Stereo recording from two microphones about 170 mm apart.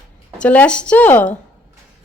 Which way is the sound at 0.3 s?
10° left (ahead or behind).